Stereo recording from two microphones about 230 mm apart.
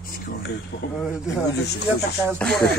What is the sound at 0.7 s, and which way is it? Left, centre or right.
Speech, left.